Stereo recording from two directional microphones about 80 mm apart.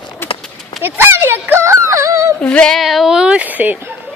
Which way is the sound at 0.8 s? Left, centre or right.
Right.